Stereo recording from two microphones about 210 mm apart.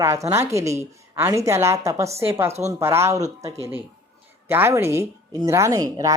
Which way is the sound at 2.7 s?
10° right (ahead or behind).